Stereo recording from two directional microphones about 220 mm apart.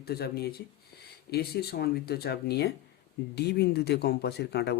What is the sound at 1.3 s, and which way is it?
Speech, 45° left (ahead or behind).